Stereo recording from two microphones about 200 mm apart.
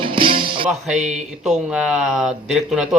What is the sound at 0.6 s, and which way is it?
Music, 5° right (ahead or behind).